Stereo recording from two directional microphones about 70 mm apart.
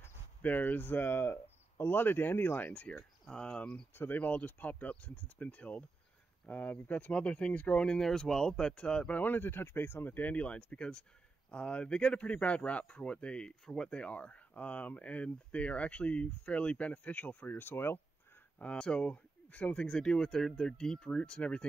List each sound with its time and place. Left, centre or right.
0.0 s speech: left
3.9 s speech: left
18.6 s speech: centre